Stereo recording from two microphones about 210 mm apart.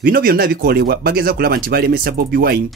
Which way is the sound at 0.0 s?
45° right (ahead or behind).